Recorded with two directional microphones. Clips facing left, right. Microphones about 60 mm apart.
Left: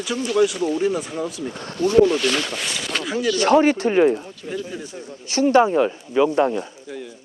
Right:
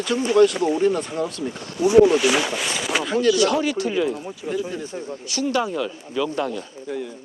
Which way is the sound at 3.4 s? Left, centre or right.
Left.